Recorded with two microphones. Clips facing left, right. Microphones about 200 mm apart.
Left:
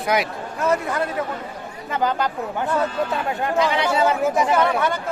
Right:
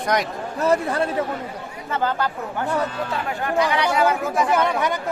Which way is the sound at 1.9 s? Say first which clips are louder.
Left 1 dB; 15° left (ahead or behind).